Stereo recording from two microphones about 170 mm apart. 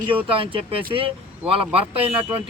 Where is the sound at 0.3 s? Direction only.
30° right (ahead or behind).